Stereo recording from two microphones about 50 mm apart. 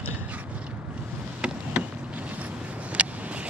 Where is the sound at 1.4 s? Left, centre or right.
Centre.